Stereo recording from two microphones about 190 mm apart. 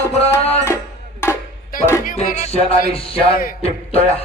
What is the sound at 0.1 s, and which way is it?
Music, 30° left (ahead or behind).